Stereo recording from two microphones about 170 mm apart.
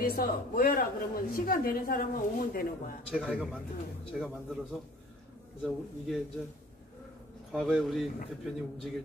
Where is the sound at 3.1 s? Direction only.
5° right (ahead or behind).